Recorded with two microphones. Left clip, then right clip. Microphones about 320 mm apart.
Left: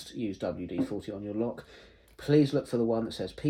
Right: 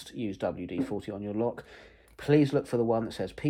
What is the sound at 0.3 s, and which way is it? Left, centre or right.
Speech, centre.